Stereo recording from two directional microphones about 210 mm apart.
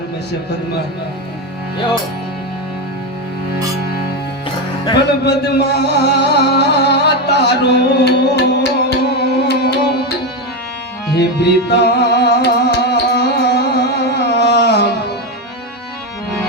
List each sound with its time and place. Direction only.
4.9 s music: 50° left (ahead or behind)
11.1 s music: 50° left (ahead or behind)
14.3 s a sound: 50° left (ahead or behind)